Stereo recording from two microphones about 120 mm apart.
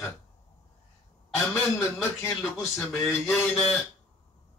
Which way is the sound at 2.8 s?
Centre (ahead or behind).